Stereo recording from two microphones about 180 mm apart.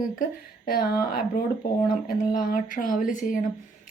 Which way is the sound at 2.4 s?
50° left (ahead or behind).